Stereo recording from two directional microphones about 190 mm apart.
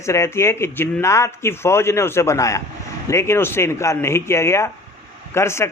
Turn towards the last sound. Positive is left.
turn(degrees=15)  # may be behind; listen again after turning